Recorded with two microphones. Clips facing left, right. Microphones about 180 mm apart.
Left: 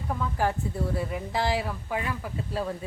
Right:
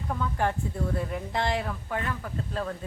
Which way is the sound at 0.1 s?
5° left (ahead or behind).